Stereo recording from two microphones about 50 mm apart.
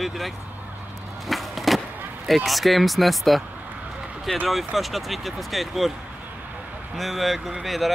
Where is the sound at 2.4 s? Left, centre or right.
Centre.